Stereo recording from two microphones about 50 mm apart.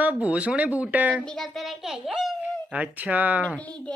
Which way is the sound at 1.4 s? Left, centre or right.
Centre.